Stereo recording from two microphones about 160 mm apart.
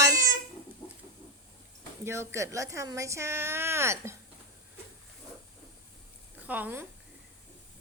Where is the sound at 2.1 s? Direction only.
20° right (ahead or behind).